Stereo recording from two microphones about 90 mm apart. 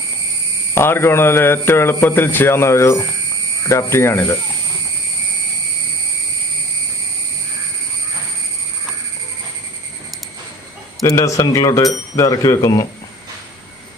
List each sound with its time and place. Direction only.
0.7 s a man's voice: 25° left (ahead or behind)
11.0 s speech: 35° left (ahead or behind)